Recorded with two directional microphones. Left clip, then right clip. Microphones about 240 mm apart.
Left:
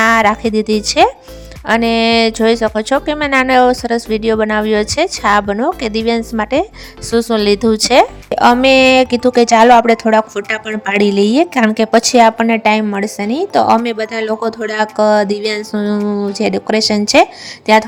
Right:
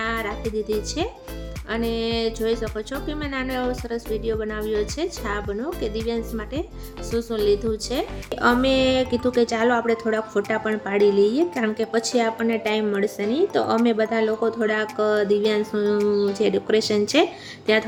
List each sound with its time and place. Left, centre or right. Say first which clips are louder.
0.0 s a woman's voice: left 16 dB; left